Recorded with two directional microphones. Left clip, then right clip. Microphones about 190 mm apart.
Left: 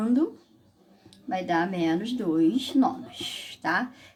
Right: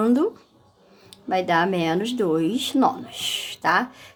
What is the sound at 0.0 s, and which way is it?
A woman's voice, 40° right (ahead or behind).